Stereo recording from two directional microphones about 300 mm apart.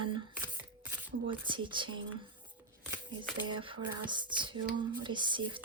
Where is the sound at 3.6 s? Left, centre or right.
Centre.